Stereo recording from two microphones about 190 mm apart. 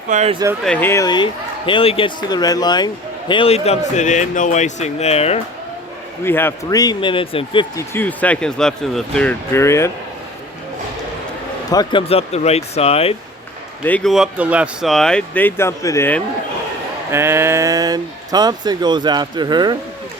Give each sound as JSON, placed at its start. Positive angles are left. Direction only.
{"t": 0.1, "sound": "speech", "side_deg": -35}
{"t": 0.6, "sound": "speech", "side_deg": 10}
{"t": 6.2, "sound": "speech", "side_deg": 10}
{"t": 7.9, "sound": "speech", "side_deg": 10}
{"t": 11.7, "sound": "speech", "side_deg": 25}
{"t": 13.8, "sound": "speech", "side_deg": 5}
{"t": 17.1, "sound": "speech", "side_deg": -15}